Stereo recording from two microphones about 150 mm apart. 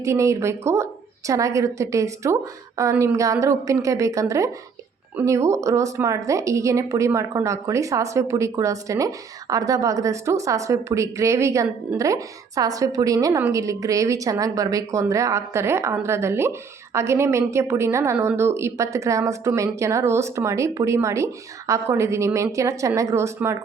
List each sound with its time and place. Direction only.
0.0 s a woman's voice: 20° right (ahead or behind)